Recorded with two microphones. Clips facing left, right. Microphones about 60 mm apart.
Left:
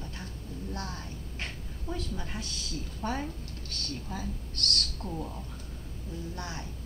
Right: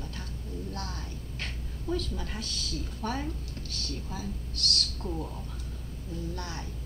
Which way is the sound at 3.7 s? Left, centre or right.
Left.